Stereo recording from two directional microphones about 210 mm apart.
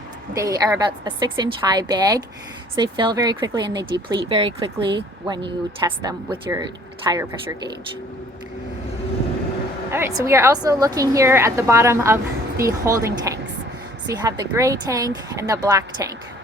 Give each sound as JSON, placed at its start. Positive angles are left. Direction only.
{"t": 0.3, "sound": "a woman's voice", "side_deg": -15}
{"t": 9.9, "sound": "a woman's voice", "side_deg": -15}